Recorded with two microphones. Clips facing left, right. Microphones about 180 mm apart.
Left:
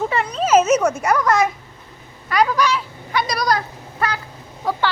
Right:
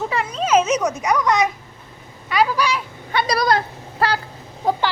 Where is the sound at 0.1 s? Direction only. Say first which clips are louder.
Left 1 dB; centre (ahead or behind).